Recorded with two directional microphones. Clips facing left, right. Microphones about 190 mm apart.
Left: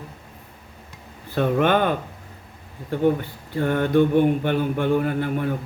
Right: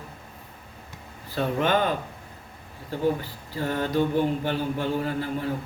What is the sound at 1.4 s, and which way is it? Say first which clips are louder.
Mantra: left 4 dB; 55° left (ahead or behind).